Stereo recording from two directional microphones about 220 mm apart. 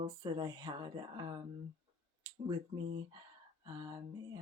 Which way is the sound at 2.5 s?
25° right (ahead or behind).